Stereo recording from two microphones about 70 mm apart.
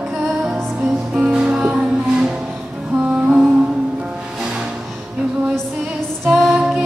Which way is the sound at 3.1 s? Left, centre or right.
Centre.